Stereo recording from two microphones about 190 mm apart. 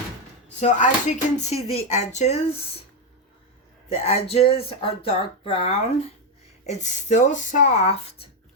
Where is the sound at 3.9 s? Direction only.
35° left (ahead or behind).